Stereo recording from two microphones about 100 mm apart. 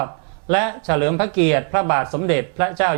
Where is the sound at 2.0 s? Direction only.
20° right (ahead or behind).